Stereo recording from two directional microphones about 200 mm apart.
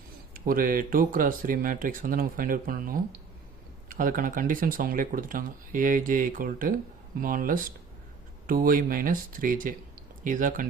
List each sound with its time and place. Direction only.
0.3 s speech: 45° right (ahead or behind)